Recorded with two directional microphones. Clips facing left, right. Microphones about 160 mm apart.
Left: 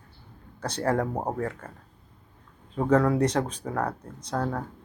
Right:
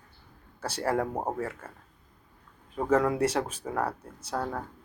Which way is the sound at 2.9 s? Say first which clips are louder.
Left 3 dB; 10° right (ahead or behind).